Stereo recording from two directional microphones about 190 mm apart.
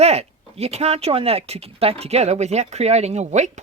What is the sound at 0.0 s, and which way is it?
Speech, 35° right (ahead or behind).